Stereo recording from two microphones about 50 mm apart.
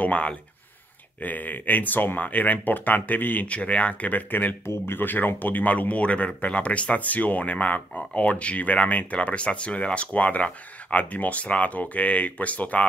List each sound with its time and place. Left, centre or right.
0.0 s speech: left
3.4 s speech: left
4.6 s speech: left